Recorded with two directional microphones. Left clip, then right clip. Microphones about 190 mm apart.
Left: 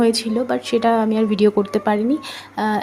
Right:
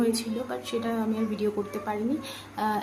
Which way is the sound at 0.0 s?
35° left (ahead or behind).